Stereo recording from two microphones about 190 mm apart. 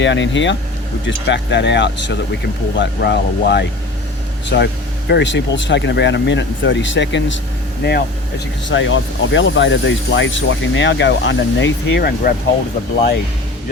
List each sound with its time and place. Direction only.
0.0 s speech: 75° left (ahead or behind)
7.8 s speech: 60° left (ahead or behind)
8.7 s speech: 80° left; by 12.3 s 55° left (ahead or behind)